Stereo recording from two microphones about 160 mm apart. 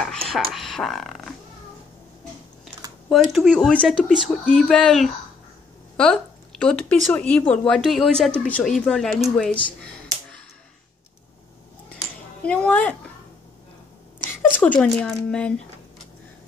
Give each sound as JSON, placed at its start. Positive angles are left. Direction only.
{"t": 0.0, "sound": "a sound", "side_deg": 5}
{"t": 0.5, "sound": "speech", "side_deg": 0}
{"t": 3.1, "sound": "speech", "side_deg": 0}
{"t": 12.4, "sound": "speech", "side_deg": 5}
{"t": 14.3, "sound": "speech", "side_deg": 10}